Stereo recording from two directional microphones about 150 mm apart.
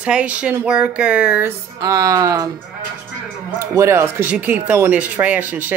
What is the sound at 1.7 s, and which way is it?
Speech, 25° right (ahead or behind).